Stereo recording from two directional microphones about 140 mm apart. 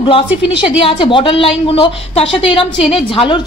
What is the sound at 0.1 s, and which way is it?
Speech, 40° left (ahead or behind).